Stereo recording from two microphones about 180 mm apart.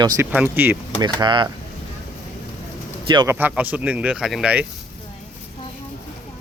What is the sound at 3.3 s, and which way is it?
Speech, 10° right (ahead or behind).